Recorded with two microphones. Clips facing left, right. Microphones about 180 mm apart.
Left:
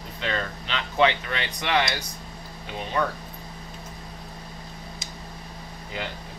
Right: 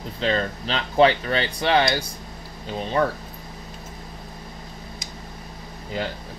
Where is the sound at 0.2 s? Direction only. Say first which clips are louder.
Right 6 dB; 35° right (ahead or behind).